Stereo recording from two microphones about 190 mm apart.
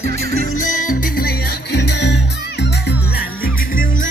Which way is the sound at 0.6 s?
45° left (ahead or behind).